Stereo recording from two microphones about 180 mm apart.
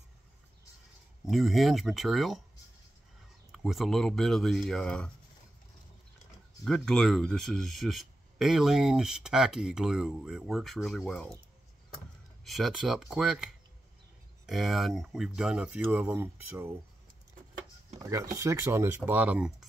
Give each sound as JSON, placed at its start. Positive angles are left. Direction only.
{"t": 1.2, "sound": "speech", "side_deg": 0}
{"t": 3.5, "sound": "speech", "side_deg": 0}
{"t": 6.6, "sound": "speech", "side_deg": 0}
{"t": 12.4, "sound": "speech", "side_deg": 0}
{"t": 18.1, "sound": "speech", "side_deg": -15}